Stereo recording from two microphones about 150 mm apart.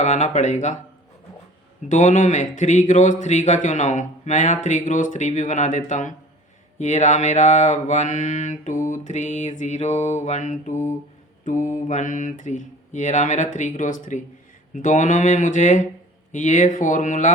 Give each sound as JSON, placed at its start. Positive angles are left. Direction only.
{"t": 0.0, "sound": "mantra", "side_deg": 50}
{"t": 1.9, "sound": "speech", "side_deg": 55}
{"t": 6.7, "sound": "mantra", "side_deg": 50}
{"t": 11.4, "sound": "speech", "side_deg": 60}